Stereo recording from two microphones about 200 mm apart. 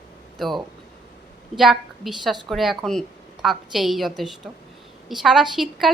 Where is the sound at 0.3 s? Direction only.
Centre (ahead or behind).